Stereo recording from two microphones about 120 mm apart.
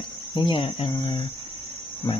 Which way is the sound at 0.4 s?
50° left (ahead or behind).